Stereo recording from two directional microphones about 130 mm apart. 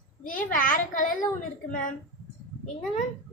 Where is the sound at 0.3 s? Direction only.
90° left.